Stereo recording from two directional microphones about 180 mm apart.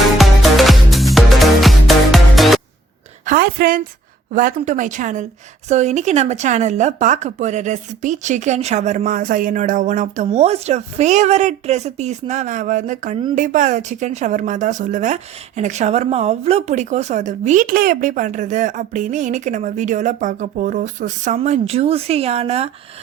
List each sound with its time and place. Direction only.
0.2 s music: centre (ahead or behind)
3.2 s a woman's voice: 55° right (ahead or behind); by 22.7 s 35° right (ahead or behind)